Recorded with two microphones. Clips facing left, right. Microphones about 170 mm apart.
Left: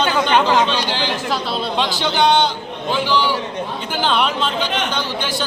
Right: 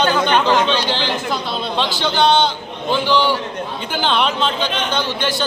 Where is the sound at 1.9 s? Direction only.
15° left (ahead or behind).